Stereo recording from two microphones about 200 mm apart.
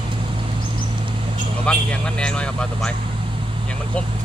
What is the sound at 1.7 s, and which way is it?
Speech, 5° left (ahead or behind).